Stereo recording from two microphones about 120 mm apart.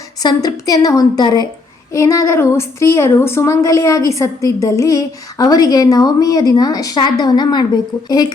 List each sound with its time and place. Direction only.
0.2 s a woman's voice: 30° left (ahead or behind)